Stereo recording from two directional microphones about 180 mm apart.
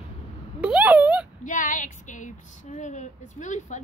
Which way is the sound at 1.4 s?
45° left (ahead or behind).